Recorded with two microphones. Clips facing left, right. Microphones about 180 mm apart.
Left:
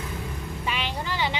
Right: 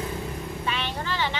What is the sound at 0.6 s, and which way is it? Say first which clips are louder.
Vehicle: left 1 dB; 10° left (ahead or behind).